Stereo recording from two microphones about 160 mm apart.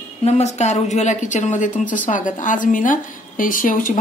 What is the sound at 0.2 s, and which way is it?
A woman's voice, 45° left (ahead or behind).